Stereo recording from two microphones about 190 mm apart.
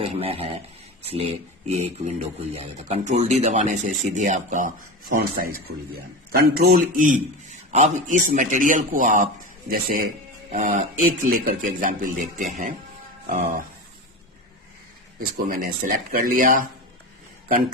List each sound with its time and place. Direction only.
0.0 s speech: 30° right (ahead or behind)
6.6 s speech: 50° right (ahead or behind)
15.2 s speech: 50° right (ahead or behind)